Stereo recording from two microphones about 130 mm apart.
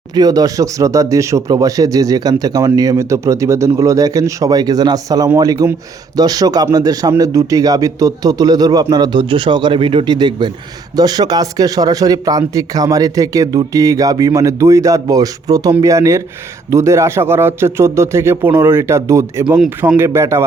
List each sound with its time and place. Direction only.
0.1 s speech: 30° right (ahead or behind)
19.5 s a man's voice: 5° right (ahead or behind)
20.0 s speech: 20° right (ahead or behind)